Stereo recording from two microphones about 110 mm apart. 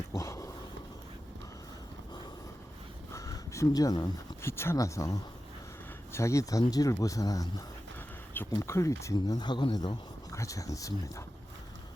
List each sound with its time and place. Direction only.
0.2 s dog: 25° left (ahead or behind)
3.1 s a sound: 30° left (ahead or behind)
4.4 s speech: 25° left (ahead or behind)
9.1 s speech: 40° left (ahead or behind)